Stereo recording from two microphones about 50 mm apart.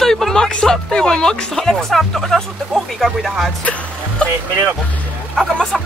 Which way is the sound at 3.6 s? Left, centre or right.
Left.